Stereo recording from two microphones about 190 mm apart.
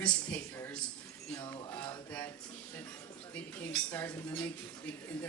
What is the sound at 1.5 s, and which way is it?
Music, 20° left (ahead or behind).